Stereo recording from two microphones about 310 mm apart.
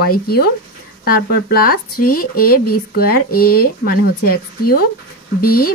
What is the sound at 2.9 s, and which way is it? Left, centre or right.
A woman's voice, left.